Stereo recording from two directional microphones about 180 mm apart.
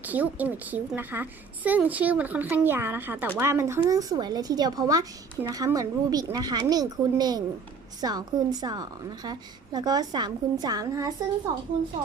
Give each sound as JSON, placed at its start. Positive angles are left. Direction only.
{"t": 0.0, "sound": "a woman's voice", "side_deg": -10}